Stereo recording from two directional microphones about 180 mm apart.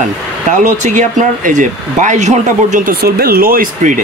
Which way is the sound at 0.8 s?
45° right (ahead or behind).